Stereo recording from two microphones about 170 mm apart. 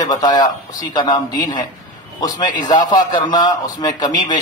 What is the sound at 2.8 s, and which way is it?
A man's voice, 25° left (ahead or behind).